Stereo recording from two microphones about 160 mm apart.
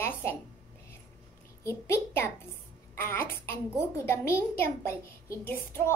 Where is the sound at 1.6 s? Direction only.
15° left (ahead or behind).